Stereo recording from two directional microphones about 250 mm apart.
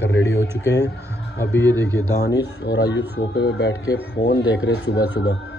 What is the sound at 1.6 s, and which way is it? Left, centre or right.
Speech, centre.